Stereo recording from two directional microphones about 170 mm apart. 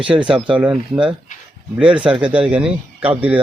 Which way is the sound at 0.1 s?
20° right (ahead or behind).